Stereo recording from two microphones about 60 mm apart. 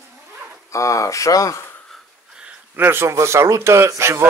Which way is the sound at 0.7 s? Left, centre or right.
Left.